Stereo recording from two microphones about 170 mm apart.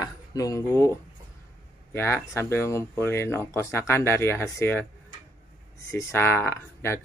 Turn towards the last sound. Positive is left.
turn(degrees=15)  # may be behind; listen again after turning